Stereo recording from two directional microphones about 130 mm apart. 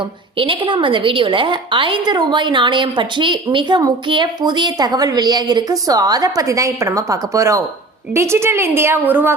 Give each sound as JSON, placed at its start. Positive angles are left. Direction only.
{"t": 0.3, "sound": "a woman's voice", "side_deg": -40}